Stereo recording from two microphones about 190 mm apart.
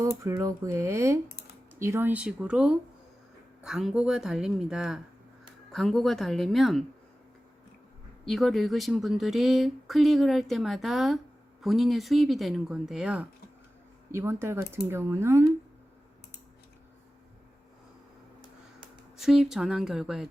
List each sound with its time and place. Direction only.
0.2 s speech: 15° right (ahead or behind); by 6.8 s centre (ahead or behind)
8.2 s speech: centre (ahead or behind)
19.1 s speech: centre (ahead or behind)